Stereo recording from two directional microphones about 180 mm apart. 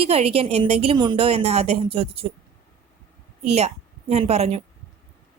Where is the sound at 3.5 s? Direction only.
35° right (ahead or behind).